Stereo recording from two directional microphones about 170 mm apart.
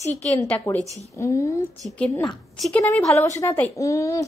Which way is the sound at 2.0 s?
Centre (ahead or behind).